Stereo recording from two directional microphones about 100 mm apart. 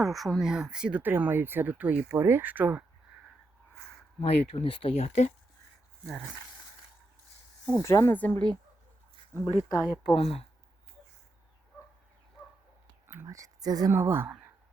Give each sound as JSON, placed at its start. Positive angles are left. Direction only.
{"t": 0.0, "sound": "speech", "side_deg": 0}
{"t": 4.2, "sound": "speech", "side_deg": 65}
{"t": 7.8, "sound": "speech", "side_deg": 30}
{"t": 8.1, "sound": "a woman's voice", "side_deg": 15}
{"t": 9.6, "sound": "speech", "side_deg": 30}
{"t": 10.2, "sound": "speech", "side_deg": 90}
{"t": 13.2, "sound": "speech", "side_deg": -35}
{"t": 13.9, "sound": "speech", "side_deg": -25}